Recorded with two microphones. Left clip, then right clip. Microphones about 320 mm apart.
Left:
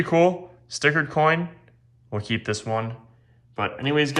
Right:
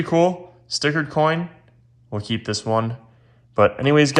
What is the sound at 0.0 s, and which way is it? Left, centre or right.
Speech, centre.